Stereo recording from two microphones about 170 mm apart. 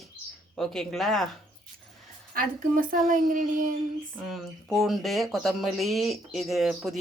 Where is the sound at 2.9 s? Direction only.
55° right (ahead or behind).